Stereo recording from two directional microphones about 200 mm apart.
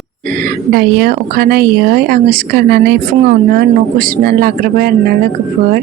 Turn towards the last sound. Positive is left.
turn(degrees=-50)  # may be behind; listen again after turning